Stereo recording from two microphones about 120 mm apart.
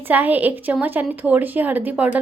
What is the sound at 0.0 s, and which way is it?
A woman's voice, 15° right (ahead or behind).